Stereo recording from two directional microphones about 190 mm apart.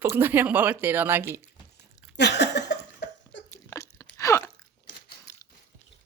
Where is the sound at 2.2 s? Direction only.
65° left (ahead or behind).